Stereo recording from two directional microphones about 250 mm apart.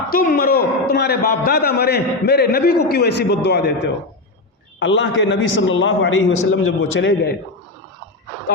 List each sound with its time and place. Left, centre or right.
0.1 s a man's voice: left
4.8 s a man's voice: left